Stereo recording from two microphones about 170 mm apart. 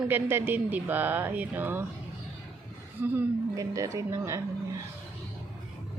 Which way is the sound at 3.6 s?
20° right (ahead or behind).